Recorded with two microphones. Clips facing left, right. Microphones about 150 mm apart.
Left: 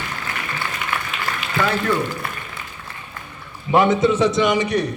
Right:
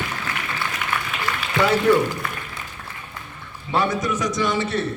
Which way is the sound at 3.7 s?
20° left (ahead or behind).